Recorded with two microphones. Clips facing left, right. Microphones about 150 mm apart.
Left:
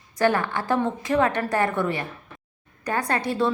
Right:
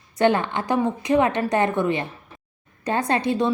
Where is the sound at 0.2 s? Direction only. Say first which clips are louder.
Right 2 dB; 20° right (ahead or behind).